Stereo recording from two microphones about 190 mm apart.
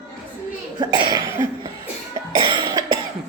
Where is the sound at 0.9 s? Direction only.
25° right (ahead or behind).